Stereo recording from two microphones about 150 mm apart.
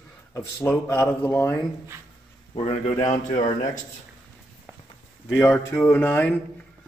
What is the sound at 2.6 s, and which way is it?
Speech, 45° left (ahead or behind).